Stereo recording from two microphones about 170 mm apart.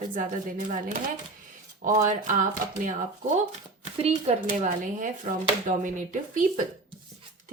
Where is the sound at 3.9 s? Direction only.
35° right (ahead or behind).